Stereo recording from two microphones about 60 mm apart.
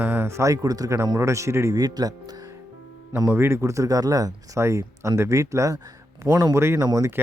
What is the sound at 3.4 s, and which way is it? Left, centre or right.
Speech, right.